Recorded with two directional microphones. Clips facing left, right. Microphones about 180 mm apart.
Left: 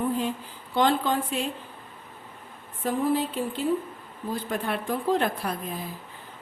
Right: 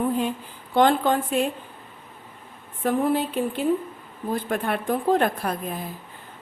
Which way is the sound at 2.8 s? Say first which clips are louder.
Right 3 dB; 60° right (ahead or behind).